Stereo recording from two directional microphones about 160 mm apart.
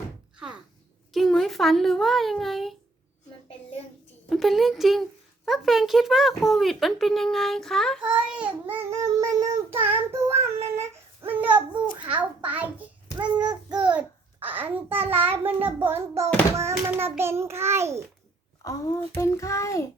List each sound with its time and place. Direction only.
0.3 s a sound: 5° right (ahead or behind)
1.1 s a child's voice: centre (ahead or behind)
4.3 s a child's voice: centre (ahead or behind); by 9.7 s 20° right (ahead or behind)
9.8 s child singing: 15° right (ahead or behind)
12.0 s a child's voice: 10° right (ahead or behind)
13.1 s child singing: 25° right (ahead or behind)
13.7 s babbling: 5° right (ahead or behind)
14.4 s a child's voice: 10° right (ahead or behind)
18.6 s a child's voice: 20° left (ahead or behind)